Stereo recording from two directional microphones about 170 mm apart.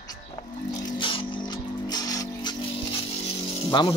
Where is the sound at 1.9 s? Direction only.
20° left (ahead or behind).